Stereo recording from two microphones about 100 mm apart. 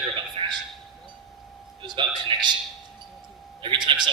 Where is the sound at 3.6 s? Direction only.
55° right (ahead or behind).